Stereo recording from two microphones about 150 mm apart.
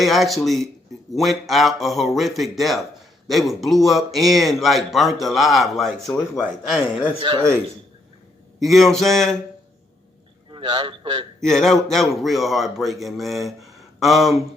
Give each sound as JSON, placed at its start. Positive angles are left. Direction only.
{"t": 0.0, "sound": "a man's voice", "side_deg": 0}
{"t": 7.2, "sound": "speech", "side_deg": -35}
{"t": 8.5, "sound": "a man's voice", "side_deg": 0}
{"t": 10.5, "sound": "a man's voice", "side_deg": -30}
{"t": 11.3, "sound": "a man's voice", "side_deg": 5}